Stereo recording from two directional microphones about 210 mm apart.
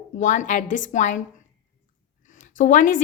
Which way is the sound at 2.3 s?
40° left (ahead or behind).